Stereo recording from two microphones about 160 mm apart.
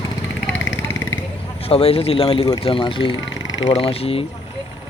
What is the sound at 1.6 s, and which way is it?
Speech, 35° left (ahead or behind).